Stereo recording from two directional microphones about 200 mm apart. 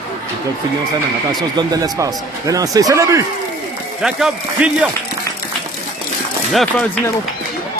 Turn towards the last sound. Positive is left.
turn(degrees=0)  # may be behind; listen again after turning